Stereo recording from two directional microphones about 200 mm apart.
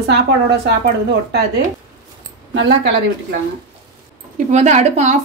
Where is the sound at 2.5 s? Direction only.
60° right (ahead or behind).